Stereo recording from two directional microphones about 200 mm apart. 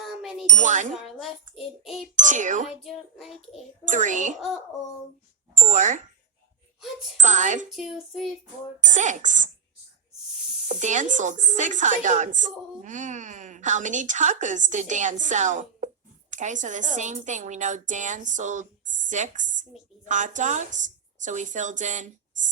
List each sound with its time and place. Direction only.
0.0 s ding: centre (ahead or behind)
0.5 s speech: 40° right (ahead or behind)
0.9 s child singing: centre (ahead or behind)
2.1 s speech: 40° right (ahead or behind)
2.8 s child singing: centre (ahead or behind)
3.8 s speech: 40° right (ahead or behind)
5.5 s speech: 40° right (ahead or behind)
7.2 s speech: 40° right (ahead or behind)
7.7 s child singing: centre (ahead or behind)
8.9 s speech: 40° right (ahead or behind)
10.7 s speech: 40° right (ahead or behind)